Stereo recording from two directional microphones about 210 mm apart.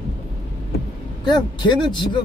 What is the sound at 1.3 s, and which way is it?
Speech, 20° left (ahead or behind).